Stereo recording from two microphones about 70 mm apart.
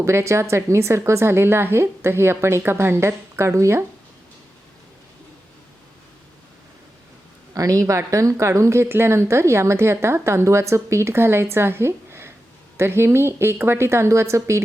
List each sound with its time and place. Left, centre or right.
0.0 s a woman's voice: right
7.5 s a woman's voice: right